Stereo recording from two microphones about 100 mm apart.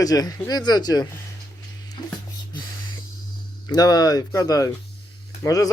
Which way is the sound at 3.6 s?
40° left (ahead or behind).